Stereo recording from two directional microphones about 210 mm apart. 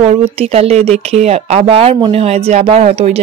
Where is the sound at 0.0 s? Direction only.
30° right (ahead or behind).